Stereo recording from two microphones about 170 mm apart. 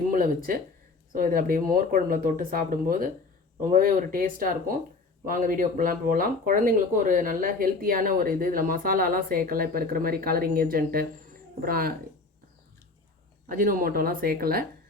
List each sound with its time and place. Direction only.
0.1 s speech: 55° right (ahead or behind)
13.5 s speech: 55° right (ahead or behind)